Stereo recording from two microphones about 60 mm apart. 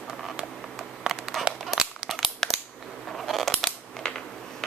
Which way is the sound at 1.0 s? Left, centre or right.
Centre.